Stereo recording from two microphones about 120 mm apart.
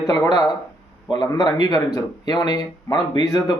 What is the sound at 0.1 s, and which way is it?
Speech, 30° left (ahead or behind).